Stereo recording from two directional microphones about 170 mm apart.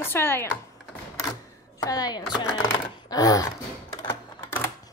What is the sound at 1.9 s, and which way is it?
Chopping, 20° left (ahead or behind).